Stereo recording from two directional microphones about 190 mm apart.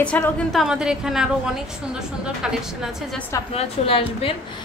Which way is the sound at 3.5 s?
30° left (ahead or behind).